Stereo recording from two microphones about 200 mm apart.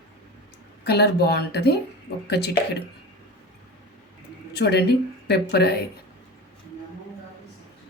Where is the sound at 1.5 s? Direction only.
55° left (ahead or behind).